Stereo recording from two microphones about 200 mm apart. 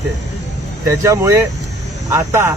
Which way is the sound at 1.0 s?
15° right (ahead or behind).